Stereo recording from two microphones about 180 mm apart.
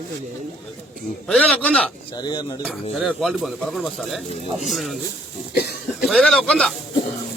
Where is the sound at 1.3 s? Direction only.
5° left (ahead or behind).